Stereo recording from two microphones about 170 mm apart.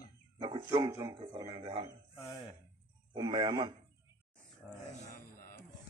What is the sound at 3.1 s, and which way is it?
Speech, 25° right (ahead or behind).